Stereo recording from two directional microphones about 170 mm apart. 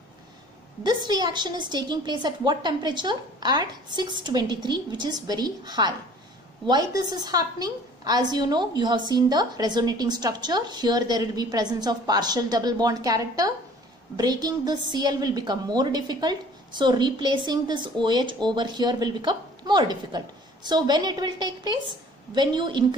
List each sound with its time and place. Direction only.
1.0 s a woman's voice: 25° right (ahead or behind)